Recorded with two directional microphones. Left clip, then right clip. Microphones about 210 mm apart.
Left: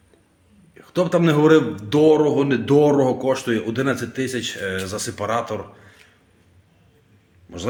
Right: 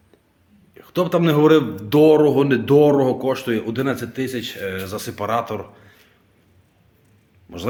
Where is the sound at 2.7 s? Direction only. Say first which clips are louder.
Right 1 dB; 5° right (ahead or behind).